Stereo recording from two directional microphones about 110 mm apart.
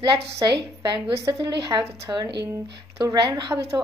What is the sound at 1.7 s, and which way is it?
Speech, 35° right (ahead or behind).